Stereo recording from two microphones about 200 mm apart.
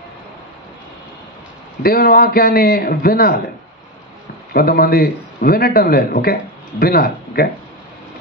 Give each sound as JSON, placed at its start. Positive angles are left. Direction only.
{"t": 1.8, "sound": "a man's voice", "side_deg": 50}
{"t": 4.6, "sound": "a man's voice", "side_deg": 50}